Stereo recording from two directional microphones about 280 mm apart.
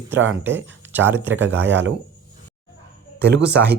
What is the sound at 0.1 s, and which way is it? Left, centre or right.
Speech, right.